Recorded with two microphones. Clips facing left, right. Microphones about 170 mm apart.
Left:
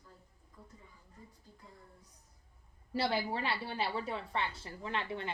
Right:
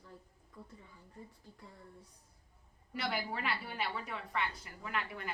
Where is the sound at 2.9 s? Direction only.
30° left (ahead or behind).